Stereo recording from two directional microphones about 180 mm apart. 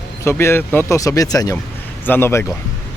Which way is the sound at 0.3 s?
15° left (ahead or behind).